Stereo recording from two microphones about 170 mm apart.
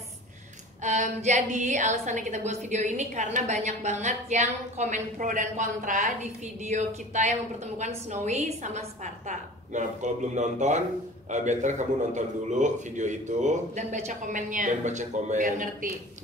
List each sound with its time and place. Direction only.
0.8 s a woman's voice: 45° right (ahead or behind)